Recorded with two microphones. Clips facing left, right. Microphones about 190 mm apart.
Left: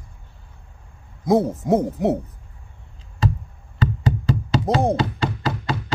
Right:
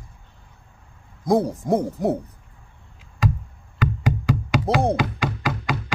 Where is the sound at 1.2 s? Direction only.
Centre (ahead or behind).